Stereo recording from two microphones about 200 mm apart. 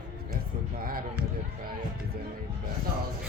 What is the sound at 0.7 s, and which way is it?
Speech, 45° right (ahead or behind).